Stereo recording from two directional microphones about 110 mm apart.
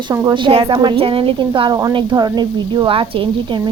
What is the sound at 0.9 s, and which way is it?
Speech, 55° right (ahead or behind).